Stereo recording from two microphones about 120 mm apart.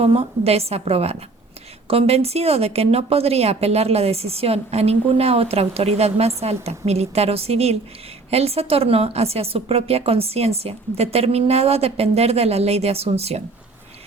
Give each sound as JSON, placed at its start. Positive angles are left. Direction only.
{"t": 0.0, "sound": "speech", "side_deg": -55}